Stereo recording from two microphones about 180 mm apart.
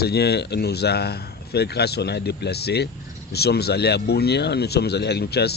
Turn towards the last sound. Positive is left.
turn(degrees=65)  # may be behind; listen again after turning